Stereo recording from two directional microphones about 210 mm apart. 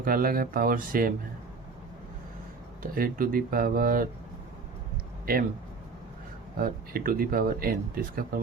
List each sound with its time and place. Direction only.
0.0 s speech: 45° right (ahead or behind)
2.8 s speech: 45° right (ahead or behind)
5.2 s speech: 45° right (ahead or behind)
6.6 s speech: 45° right (ahead or behind)